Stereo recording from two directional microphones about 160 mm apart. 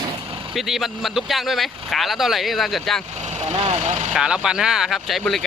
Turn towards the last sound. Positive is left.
turn(degrees=0)  # may be behind; listen again after turning